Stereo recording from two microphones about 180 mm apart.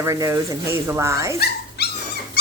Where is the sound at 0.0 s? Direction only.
15° right (ahead or behind).